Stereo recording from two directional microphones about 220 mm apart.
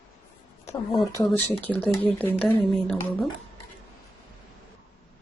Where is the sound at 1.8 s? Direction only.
5° left (ahead or behind).